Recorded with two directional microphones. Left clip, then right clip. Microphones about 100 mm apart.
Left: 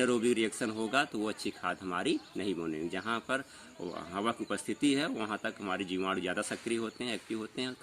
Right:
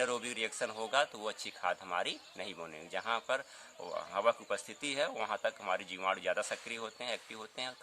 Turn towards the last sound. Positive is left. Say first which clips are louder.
# left 4 dB
turn(degrees=-35)  # may be behind; listen again after turning